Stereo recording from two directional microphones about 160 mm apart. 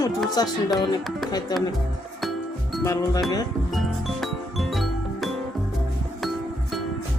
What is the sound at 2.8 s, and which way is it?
Speech, 20° left (ahead or behind).